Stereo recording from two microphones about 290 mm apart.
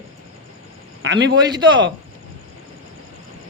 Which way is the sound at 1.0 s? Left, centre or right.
Right.